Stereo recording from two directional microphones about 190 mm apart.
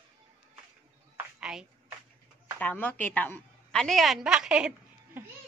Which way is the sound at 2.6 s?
10° left (ahead or behind).